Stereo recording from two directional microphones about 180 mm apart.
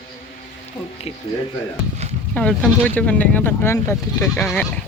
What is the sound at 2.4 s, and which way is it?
Speech, 5° left (ahead or behind).